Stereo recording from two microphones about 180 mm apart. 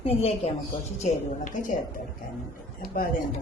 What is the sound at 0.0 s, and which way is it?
Speech, 35° left (ahead or behind).